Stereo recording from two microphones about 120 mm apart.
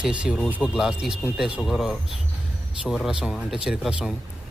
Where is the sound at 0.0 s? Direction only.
10° right (ahead or behind).